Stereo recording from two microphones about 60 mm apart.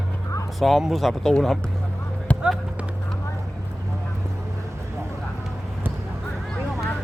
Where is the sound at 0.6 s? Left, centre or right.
Centre.